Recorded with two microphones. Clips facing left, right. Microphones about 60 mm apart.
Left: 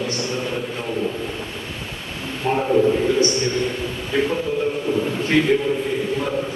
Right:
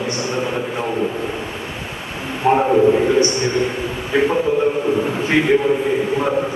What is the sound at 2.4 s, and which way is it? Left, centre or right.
Speech, right.